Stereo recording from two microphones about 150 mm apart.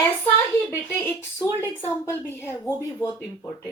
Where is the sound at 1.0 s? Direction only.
15° left (ahead or behind).